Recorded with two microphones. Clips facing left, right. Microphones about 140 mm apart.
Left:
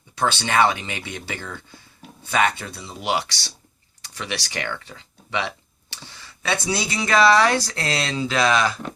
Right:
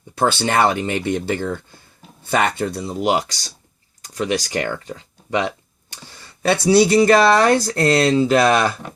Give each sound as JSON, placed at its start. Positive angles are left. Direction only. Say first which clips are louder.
{"t": 0.4, "sound": "speech", "louder": "even", "side_deg": -50}